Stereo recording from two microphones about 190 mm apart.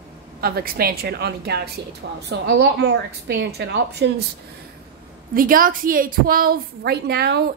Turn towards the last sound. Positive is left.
turn(degrees=-60)  # may be behind; listen again after turning